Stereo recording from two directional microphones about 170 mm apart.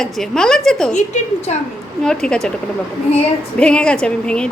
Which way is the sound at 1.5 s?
40° left (ahead or behind).